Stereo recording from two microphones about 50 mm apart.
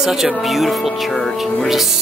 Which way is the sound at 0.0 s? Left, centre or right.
Centre.